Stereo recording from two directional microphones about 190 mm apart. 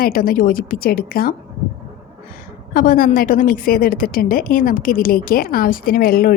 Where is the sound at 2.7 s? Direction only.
45° left (ahead or behind).